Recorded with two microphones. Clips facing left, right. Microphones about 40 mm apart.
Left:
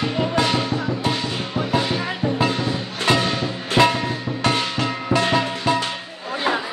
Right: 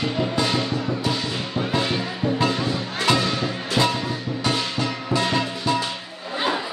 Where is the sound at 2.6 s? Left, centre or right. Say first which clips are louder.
Left 1 dB; left.